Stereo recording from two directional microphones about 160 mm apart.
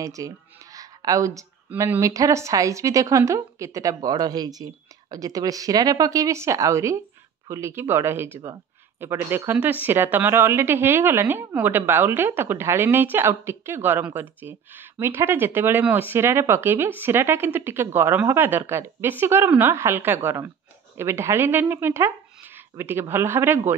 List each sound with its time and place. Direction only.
0.0 s speech: 20° right (ahead or behind)
0.7 s a sound: 20° right (ahead or behind)
1.7 s speech: 15° right (ahead or behind)